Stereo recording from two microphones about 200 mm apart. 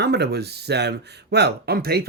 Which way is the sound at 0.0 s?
55° right (ahead or behind).